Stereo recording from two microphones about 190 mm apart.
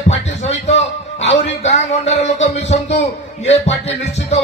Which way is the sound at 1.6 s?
35° left (ahead or behind).